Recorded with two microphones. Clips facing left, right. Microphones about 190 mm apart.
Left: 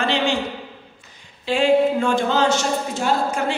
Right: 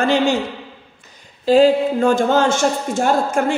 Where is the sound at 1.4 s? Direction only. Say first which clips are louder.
Right 4 dB; 40° right (ahead or behind).